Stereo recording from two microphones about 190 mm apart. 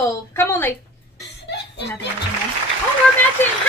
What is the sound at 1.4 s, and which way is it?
Chuckle, 65° left (ahead or behind).